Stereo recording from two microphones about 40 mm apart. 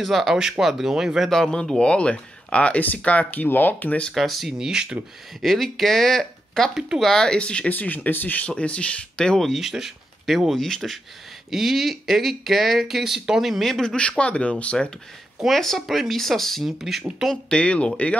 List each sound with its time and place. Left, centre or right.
0.0 s speech: centre
0.4 s speech: centre
1.8 s speech: left
4.1 s speech: centre
4.6 s speech: centre
5.4 s speech: centre
7.3 s speech: left
7.7 s speech: left
8.5 s speech: left
9.6 s speech: centre
13.7 s speech: centre
13.9 s speech: left
15.4 s speech: centre
17.5 s speech: left